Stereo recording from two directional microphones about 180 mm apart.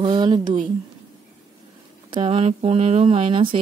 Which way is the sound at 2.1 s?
30° right (ahead or behind).